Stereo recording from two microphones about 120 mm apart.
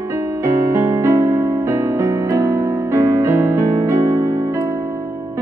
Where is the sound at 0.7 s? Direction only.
20° right (ahead or behind).